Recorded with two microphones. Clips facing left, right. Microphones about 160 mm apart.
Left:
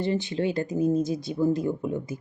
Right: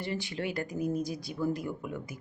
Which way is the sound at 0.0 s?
20° left (ahead or behind).